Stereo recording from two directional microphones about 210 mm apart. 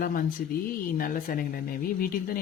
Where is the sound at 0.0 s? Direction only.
40° left (ahead or behind).